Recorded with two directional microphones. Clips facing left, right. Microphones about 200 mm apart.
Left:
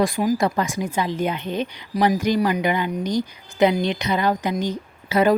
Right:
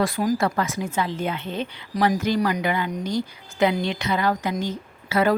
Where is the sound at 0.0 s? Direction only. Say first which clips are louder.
Left 2 dB; 10° left (ahead or behind).